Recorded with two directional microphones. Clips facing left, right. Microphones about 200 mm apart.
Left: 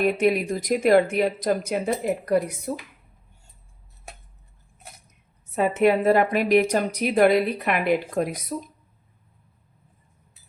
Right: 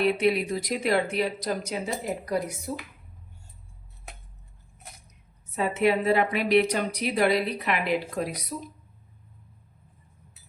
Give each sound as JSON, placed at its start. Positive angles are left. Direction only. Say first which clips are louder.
{"t": 0.0, "sound": "a woman's voice", "louder": "left 2 dB", "side_deg": 50}
{"t": 5.5, "sound": "a woman's voice", "louder": "left 4 dB", "side_deg": 50}